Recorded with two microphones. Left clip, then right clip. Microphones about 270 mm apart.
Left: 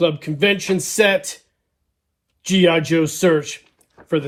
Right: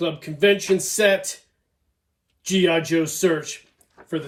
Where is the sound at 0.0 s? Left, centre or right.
Centre.